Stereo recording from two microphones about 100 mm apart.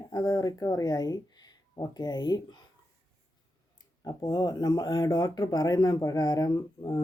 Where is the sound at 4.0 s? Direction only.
35° left (ahead or behind).